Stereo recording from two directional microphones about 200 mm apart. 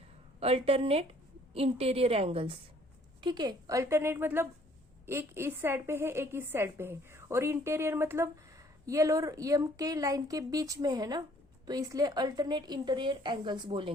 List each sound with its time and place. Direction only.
0.3 s a woman's voice: 30° right (ahead or behind)